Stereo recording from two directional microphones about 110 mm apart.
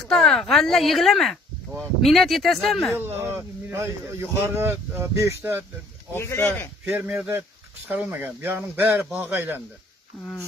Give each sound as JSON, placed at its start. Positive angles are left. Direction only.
{"t": 0.0, "sound": "speech", "side_deg": 5}
{"t": 3.0, "sound": "speech", "side_deg": -20}
{"t": 6.1, "sound": "speech", "side_deg": 20}
{"t": 6.8, "sound": "speech", "side_deg": -20}